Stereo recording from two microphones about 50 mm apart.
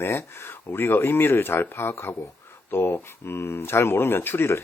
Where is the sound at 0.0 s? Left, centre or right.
Left.